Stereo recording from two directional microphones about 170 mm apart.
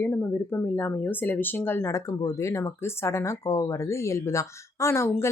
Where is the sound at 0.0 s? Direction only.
10° left (ahead or behind).